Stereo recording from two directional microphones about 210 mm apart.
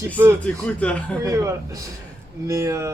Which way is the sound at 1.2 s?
15° right (ahead or behind).